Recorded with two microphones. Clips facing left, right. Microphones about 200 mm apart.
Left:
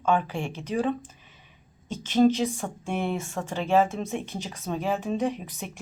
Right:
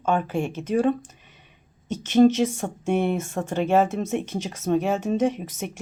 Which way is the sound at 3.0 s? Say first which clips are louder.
Right 4 dB; 20° right (ahead or behind).